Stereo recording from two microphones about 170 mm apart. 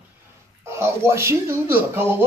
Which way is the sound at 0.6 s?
15° right (ahead or behind).